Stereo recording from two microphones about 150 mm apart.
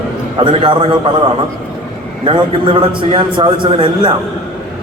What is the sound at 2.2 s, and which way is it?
A man's voice, 40° right (ahead or behind).